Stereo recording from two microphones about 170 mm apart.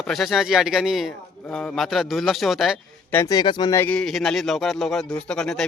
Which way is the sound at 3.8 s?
5° left (ahead or behind).